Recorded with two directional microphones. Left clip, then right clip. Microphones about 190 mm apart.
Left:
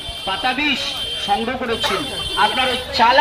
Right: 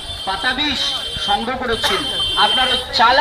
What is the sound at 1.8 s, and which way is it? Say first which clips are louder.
Speech: right 2 dB; 35° right (ahead or behind).